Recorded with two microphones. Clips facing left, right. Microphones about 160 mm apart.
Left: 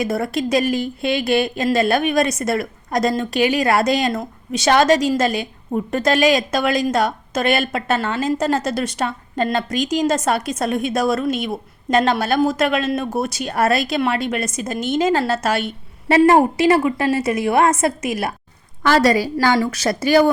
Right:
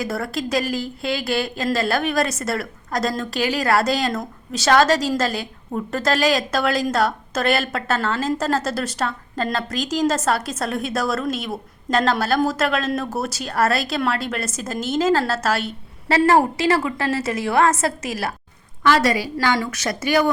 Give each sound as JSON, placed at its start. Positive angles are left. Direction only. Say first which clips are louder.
{"t": 0.0, "sound": "a woman's voice", "louder": "left 4 dB", "side_deg": 20}
{"t": 18.8, "sound": "a woman's voice", "louder": "left 3 dB", "side_deg": 40}